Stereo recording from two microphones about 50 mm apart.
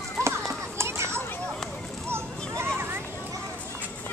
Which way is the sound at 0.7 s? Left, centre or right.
Right.